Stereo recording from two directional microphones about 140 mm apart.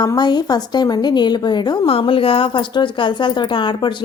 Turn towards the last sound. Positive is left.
turn(degrees=35)  # may be behind; listen again after turning